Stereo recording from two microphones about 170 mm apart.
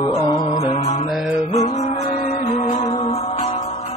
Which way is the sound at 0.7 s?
40° left (ahead or behind).